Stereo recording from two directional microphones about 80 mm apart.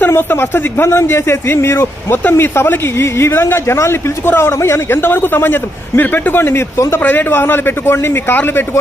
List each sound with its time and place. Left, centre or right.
0.0 s a man's voice: left